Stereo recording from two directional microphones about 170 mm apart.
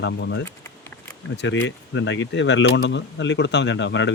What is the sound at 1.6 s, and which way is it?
Speech, 90° left.